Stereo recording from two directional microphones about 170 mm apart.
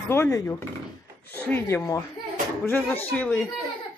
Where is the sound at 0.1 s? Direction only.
15° left (ahead or behind).